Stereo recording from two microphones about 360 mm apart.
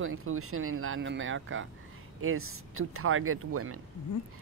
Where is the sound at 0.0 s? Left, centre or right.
Right.